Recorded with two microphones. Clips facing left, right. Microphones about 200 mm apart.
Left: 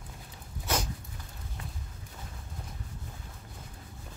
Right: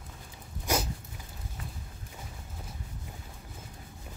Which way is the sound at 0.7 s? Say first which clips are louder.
Right 2 dB; 10° right (ahead or behind).